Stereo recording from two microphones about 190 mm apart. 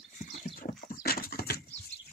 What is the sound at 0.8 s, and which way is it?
Dog, 50° left (ahead or behind).